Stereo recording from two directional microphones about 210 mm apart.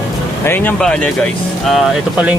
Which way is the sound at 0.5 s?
10° left (ahead or behind).